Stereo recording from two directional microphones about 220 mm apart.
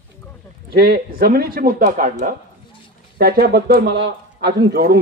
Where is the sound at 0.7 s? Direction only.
40° right (ahead or behind).